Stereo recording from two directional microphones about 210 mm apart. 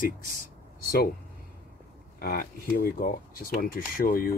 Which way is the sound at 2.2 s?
45° left (ahead or behind).